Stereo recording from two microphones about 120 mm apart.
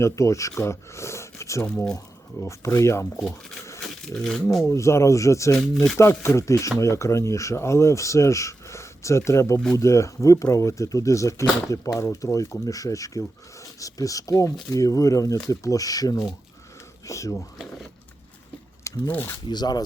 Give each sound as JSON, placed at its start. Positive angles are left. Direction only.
{"t": 0.0, "sound": "speech", "side_deg": 25}
{"t": 1.6, "sound": "speech", "side_deg": 5}
{"t": 2.4, "sound": "speech", "side_deg": 25}
{"t": 4.1, "sound": "speech", "side_deg": 5}
{"t": 4.7, "sound": "speech", "side_deg": 25}
{"t": 5.7, "sound": "speech", "side_deg": 0}
{"t": 6.2, "sound": "speech", "side_deg": 25}
{"t": 18.9, "sound": "speech", "side_deg": 15}
{"t": 19.5, "sound": "speech", "side_deg": 35}